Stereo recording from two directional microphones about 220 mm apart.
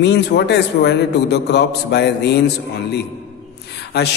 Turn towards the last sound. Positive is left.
turn(degrees=50)  # may be behind; listen again after turning